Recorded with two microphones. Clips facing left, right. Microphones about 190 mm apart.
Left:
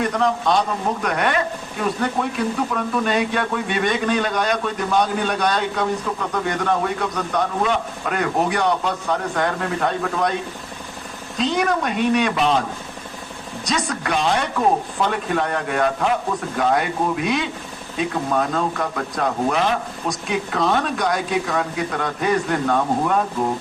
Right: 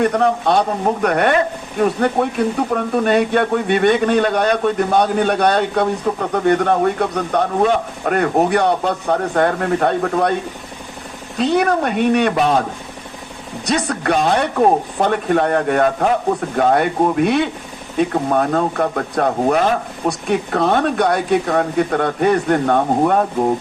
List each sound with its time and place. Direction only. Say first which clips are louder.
0.0 s speech: right 4 dB; 55° right (ahead or behind)
11.3 s speech: right 5 dB; 60° right (ahead or behind)
13.7 s speech: right 5 dB; 60° right (ahead or behind)